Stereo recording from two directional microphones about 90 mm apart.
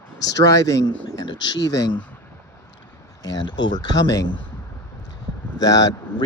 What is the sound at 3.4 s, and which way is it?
Speech, 55° left (ahead or behind).